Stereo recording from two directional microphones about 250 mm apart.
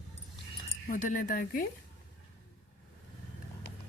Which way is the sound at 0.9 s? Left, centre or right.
Left.